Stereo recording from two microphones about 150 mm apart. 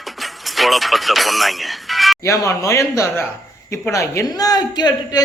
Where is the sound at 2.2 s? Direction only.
20° left (ahead or behind).